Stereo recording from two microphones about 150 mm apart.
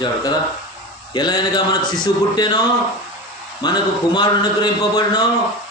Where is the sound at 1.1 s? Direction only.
30° left (ahead or behind).